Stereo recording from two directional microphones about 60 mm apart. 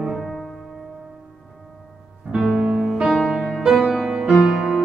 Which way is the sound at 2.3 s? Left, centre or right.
Centre.